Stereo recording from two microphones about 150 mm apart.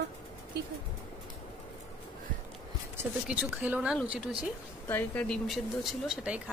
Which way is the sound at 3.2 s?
10° right (ahead or behind).